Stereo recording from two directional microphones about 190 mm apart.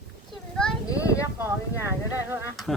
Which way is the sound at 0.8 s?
15° left (ahead or behind).